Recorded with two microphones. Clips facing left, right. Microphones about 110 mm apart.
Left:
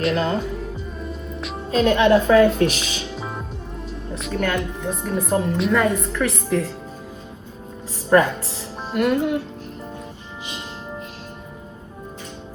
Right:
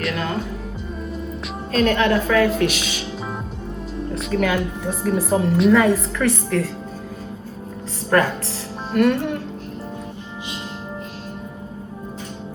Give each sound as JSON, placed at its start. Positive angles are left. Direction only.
{"t": 0.1, "sound": "speech", "side_deg": 30}
{"t": 1.7, "sound": "a woman's voice", "side_deg": 20}
{"t": 4.1, "sound": "a woman's voice", "side_deg": 0}
{"t": 8.9, "sound": "a woman's voice", "side_deg": 5}